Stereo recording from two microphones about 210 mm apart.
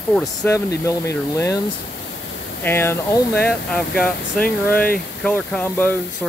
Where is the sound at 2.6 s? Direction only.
10° left (ahead or behind).